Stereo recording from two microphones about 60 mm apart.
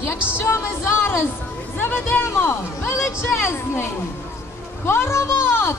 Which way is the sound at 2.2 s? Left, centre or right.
Left.